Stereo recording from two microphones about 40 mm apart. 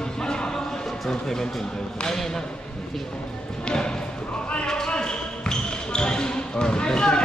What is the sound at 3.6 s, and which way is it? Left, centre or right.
Speech, left.